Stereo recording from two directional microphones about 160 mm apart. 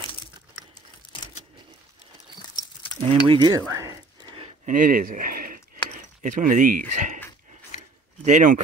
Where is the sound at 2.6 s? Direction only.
25° left (ahead or behind).